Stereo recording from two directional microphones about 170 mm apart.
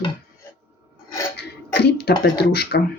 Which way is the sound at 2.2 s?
70° left (ahead or behind).